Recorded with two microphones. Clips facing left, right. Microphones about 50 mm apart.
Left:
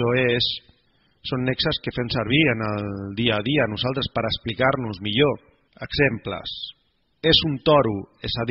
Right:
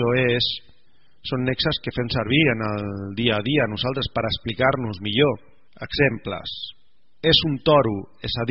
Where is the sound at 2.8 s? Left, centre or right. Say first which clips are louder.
Even; right.